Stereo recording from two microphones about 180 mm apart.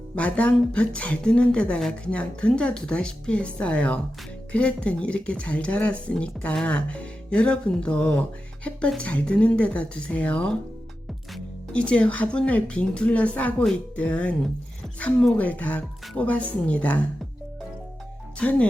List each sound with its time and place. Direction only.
0.2 s speech: 10° left (ahead or behind)
11.7 s speech: 5° left (ahead or behind)
18.3 s speech: 10° left (ahead or behind)